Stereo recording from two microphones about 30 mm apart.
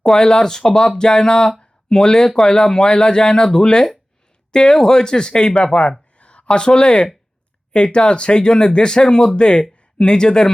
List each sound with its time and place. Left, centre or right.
0.0 s speech: left
6.1 s a sound: left
6.6 s speech: left